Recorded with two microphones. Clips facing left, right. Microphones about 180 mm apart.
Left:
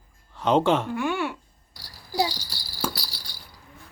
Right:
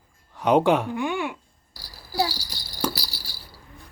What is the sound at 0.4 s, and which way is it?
A child's voice, 15° right (ahead or behind).